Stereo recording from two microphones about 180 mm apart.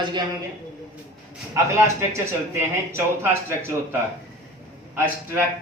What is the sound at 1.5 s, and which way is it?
Speech, 15° right (ahead or behind).